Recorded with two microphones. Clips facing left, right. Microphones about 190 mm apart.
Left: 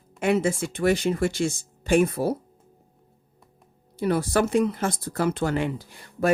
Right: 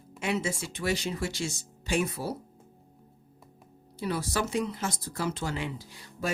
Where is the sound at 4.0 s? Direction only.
55° left (ahead or behind).